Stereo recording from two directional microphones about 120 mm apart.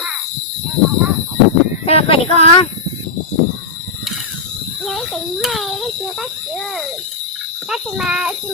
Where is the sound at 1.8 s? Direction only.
55° left (ahead or behind).